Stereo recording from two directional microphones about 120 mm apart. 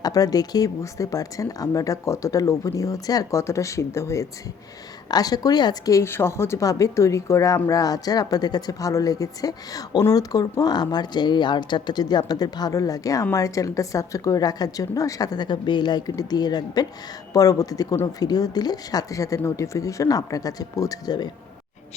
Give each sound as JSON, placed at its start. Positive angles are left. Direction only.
{"t": 0.0, "sound": "a woman's voice", "side_deg": 30}